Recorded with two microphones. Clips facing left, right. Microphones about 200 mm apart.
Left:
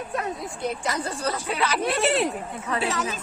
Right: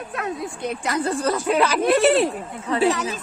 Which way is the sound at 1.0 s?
50° right (ahead or behind).